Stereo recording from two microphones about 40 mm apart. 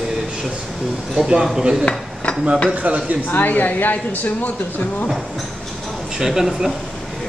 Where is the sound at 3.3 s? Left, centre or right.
Left.